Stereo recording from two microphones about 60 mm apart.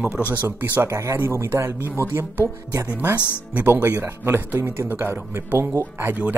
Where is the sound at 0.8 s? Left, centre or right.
Right.